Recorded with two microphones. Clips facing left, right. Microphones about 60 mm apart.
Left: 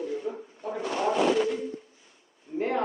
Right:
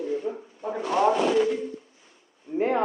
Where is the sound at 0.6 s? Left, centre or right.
Right.